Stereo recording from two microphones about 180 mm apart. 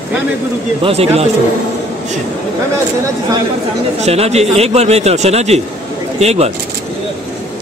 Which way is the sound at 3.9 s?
35° right (ahead or behind).